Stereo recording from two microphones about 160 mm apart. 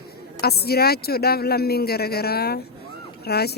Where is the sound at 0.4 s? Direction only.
80° left.